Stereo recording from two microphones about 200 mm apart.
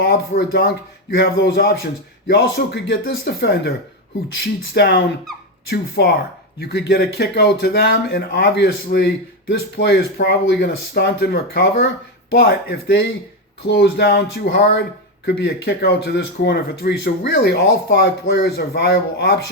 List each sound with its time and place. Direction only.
0.0 s speech: 50° left (ahead or behind)
1.1 s speech: 60° left (ahead or behind)